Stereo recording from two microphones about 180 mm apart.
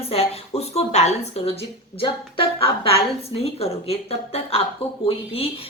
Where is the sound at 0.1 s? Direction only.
35° left (ahead or behind).